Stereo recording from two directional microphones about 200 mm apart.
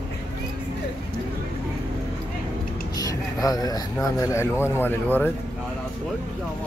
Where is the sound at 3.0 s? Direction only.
20° left (ahead or behind).